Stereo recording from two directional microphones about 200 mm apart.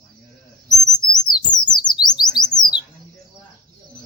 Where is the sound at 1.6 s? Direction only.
20° left (ahead or behind).